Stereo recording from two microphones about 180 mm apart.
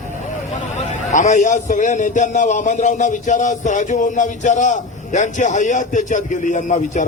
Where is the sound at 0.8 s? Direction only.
40° left (ahead or behind).